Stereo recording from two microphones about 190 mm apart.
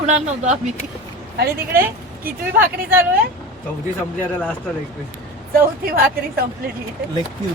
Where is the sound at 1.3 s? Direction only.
55° right (ahead or behind).